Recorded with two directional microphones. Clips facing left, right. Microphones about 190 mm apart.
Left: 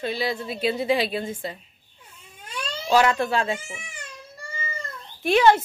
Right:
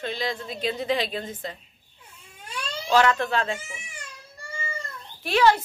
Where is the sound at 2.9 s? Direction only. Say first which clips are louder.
Left 1 dB; 10° left (ahead or behind).